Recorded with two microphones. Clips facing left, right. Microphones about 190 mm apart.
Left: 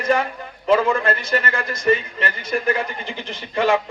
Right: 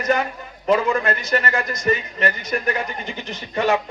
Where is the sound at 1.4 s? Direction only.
35° right (ahead or behind).